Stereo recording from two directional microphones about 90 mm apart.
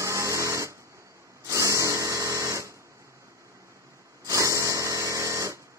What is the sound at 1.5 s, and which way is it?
Sewing machine, 35° right (ahead or behind).